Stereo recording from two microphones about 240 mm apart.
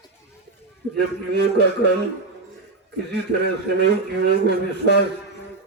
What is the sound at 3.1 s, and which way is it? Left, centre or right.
A man's voice, right.